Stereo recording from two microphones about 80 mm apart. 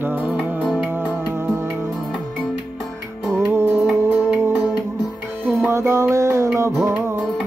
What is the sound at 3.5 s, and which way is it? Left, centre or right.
Music, right.